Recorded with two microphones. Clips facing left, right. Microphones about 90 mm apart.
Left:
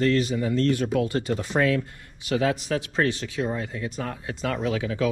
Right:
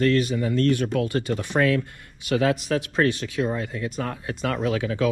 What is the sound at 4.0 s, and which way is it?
Speech, 50° right (ahead or behind).